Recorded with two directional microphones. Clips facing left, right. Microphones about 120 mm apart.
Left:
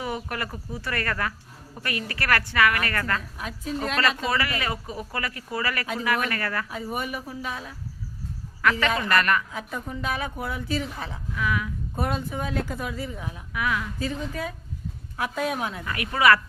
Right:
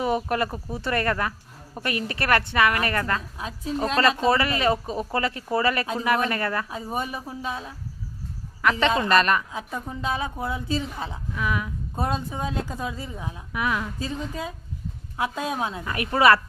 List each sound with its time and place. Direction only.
0.0 s a woman's voice: 25° right (ahead or behind)